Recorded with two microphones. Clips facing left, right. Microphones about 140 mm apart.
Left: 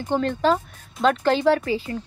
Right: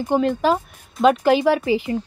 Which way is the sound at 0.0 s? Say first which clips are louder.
Right 3 dB; 10° right (ahead or behind).